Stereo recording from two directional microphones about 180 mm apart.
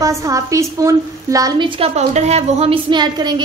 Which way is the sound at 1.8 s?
35° right (ahead or behind).